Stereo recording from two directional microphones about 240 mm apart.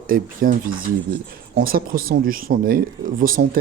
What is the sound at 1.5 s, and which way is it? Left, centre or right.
A man's voice, right.